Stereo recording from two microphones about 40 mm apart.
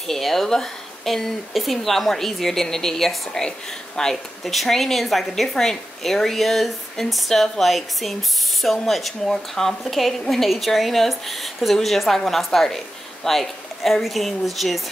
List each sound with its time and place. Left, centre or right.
0.0 s speech: centre
1.5 s a woman's voice: centre
4.5 s a woman's voice: centre